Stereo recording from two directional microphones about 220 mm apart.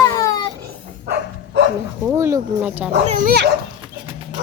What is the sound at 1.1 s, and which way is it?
Dog, 50° right (ahead or behind).